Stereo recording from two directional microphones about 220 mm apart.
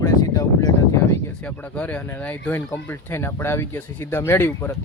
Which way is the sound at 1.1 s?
10° left (ahead or behind).